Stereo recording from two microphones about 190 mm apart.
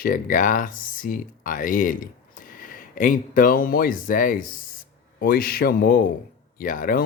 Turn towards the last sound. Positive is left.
turn(degrees=45)  # may be behind; listen again after turning